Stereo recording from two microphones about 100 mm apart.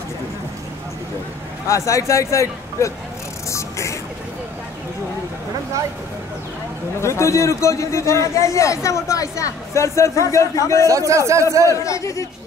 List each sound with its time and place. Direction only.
1.7 s a man's voice: 30° left (ahead or behind)
3.4 s music: 30° left (ahead or behind)
7.0 s a man's voice: 30° left (ahead or behind)
10.9 s a man's voice: 30° right (ahead or behind)
11.7 s a man's voice: 30° left (ahead or behind)